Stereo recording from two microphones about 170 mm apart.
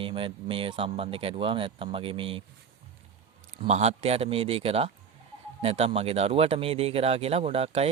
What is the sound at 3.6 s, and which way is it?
Speech, 40° right (ahead or behind).